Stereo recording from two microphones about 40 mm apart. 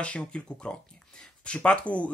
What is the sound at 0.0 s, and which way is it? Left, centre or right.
Speech, left.